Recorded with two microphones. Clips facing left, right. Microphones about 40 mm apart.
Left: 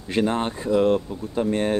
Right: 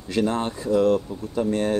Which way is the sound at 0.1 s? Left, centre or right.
Left.